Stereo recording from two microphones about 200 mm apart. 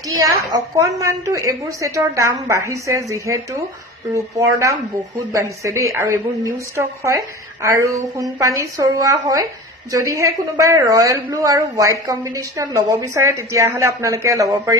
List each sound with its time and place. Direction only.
0.0 s a woman's voice: 15° right (ahead or behind)